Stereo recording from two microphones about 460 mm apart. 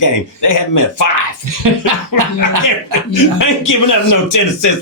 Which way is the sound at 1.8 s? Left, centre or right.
Right.